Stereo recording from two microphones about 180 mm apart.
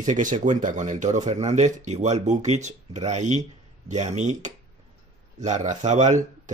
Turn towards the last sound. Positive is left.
turn(degrees=-40)  # may be behind; listen again after turning